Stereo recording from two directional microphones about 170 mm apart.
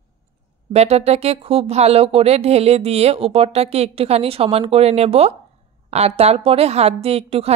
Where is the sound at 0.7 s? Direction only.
40° right (ahead or behind).